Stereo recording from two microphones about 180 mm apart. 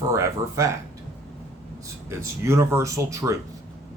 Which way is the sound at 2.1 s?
15° right (ahead or behind).